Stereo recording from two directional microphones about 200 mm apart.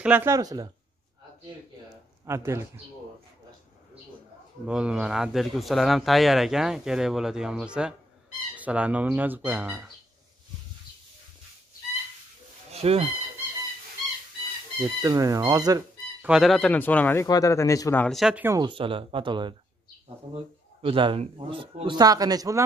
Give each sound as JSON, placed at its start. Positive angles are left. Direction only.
{"t": 0.0, "sound": "speech", "side_deg": -10}
{"t": 1.9, "sound": "a sound", "side_deg": -15}
{"t": 4.6, "sound": "speech", "side_deg": -5}
{"t": 12.7, "sound": "speech", "side_deg": -30}
{"t": 14.8, "sound": "speech", "side_deg": -20}
{"t": 16.3, "sound": "speech", "side_deg": 0}
{"t": 18.0, "sound": "speech", "side_deg": 0}
{"t": 18.6, "sound": "speech", "side_deg": -25}
{"t": 20.8, "sound": "speech", "side_deg": -25}